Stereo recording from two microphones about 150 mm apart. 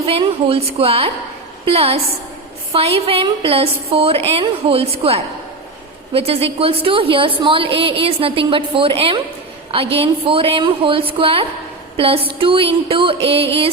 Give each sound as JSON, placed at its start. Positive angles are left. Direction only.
{"t": 0.1, "sound": "a woman's voice", "side_deg": -40}